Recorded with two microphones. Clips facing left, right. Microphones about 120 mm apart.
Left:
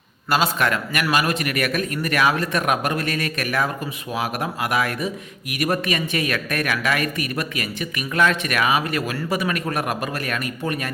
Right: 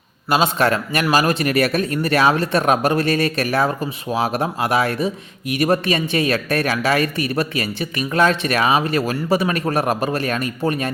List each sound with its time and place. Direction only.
0.3 s a man's voice: 20° right (ahead or behind)
0.6 s speech: 30° right (ahead or behind)